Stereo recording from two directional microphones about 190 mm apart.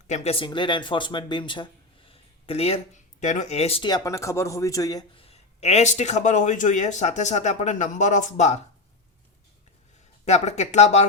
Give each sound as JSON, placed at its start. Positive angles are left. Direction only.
{"t": 0.1, "sound": "speech", "side_deg": 35}
{"t": 10.2, "sound": "speech", "side_deg": 35}